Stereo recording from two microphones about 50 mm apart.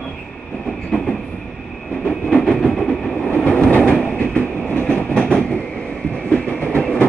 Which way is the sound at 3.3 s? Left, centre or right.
Left.